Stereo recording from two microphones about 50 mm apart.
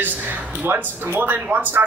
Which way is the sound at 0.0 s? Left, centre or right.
Right.